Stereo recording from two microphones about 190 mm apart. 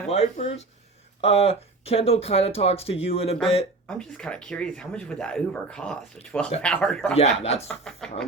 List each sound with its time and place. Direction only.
0.1 s speech: 35° left (ahead or behind)
3.8 s speech: 5° left (ahead or behind)
7.2 s speech: 35° left (ahead or behind)
7.7 s speech: 5° left (ahead or behind)